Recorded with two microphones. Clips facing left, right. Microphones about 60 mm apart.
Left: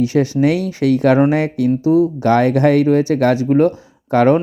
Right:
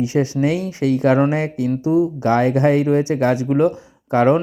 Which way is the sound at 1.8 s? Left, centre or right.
Centre.